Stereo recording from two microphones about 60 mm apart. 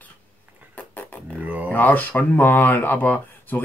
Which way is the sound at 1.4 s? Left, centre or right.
Right.